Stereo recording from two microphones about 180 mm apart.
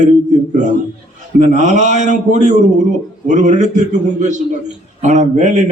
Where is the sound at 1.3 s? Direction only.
40° right (ahead or behind).